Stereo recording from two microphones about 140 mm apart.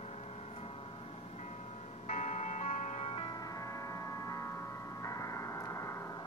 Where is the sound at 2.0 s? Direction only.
60° left (ahead or behind).